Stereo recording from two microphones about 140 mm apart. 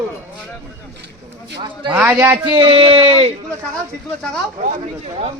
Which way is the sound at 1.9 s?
10° right (ahead or behind).